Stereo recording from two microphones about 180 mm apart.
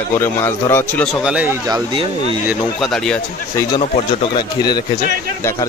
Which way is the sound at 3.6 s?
15° left (ahead or behind).